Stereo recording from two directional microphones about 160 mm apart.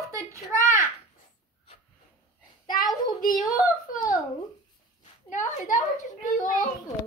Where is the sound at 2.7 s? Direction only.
25° left (ahead or behind).